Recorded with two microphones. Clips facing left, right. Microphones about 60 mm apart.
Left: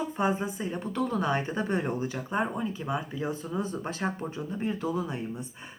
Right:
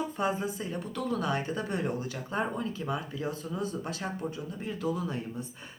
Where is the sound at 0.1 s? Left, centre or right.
Left.